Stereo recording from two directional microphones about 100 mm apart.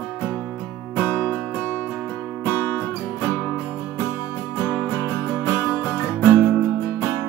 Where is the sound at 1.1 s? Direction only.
10° left (ahead or behind).